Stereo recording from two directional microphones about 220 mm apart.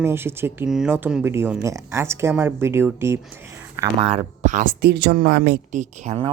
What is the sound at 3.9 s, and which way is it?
Speech, 30° right (ahead or behind).